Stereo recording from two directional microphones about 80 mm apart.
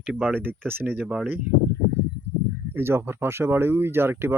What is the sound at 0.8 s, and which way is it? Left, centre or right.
Speech, right.